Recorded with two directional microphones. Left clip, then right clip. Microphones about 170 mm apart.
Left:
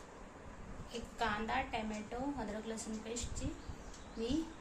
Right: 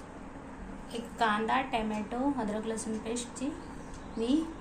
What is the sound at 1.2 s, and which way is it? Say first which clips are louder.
A woman's voice: right 9 dB; 25° right (ahead or behind).